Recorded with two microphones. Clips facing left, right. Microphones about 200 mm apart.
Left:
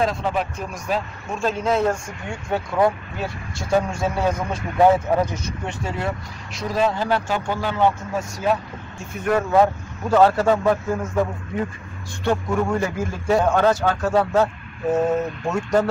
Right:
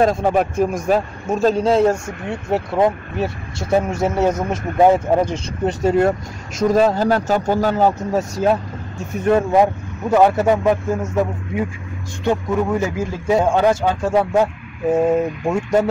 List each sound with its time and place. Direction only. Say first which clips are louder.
0.0 s speech: right 6 dB; 45° right (ahead or behind); by 5.8 s 30° right (ahead or behind)
5.8 s speech: right 13 dB; 45° right (ahead or behind)
9.2 s speech: right 3 dB; 20° right (ahead or behind)
12.3 s a man's voice: right 3 dB; 20° right (ahead or behind)